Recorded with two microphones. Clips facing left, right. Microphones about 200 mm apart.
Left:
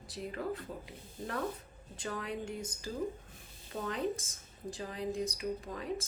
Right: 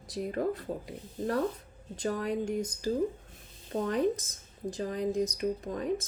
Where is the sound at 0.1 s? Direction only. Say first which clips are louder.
Right 8 dB; 40° right (ahead or behind).